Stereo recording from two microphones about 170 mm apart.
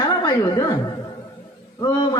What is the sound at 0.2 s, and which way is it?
A man's voice, 25° left (ahead or behind).